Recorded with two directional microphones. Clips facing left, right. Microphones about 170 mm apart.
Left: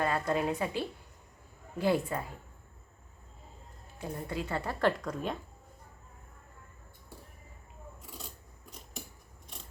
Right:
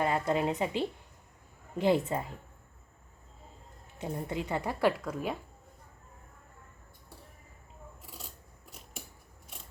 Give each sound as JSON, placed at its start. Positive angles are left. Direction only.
{"t": 0.0, "sound": "a woman's voice", "side_deg": -20}
{"t": 3.9, "sound": "speech", "side_deg": -20}